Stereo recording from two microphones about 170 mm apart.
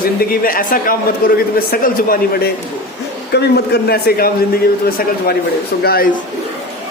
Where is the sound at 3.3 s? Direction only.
70° left (ahead or behind).